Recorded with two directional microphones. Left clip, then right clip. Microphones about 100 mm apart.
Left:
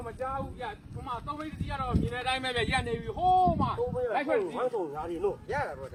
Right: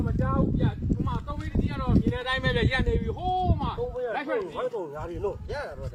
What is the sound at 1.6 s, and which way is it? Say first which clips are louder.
Speech: right 3 dB; 35° left (ahead or behind).